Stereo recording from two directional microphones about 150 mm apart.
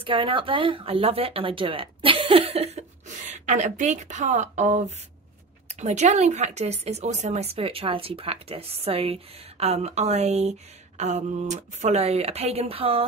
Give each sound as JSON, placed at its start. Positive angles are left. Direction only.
{"t": 0.0, "sound": "speech", "side_deg": -35}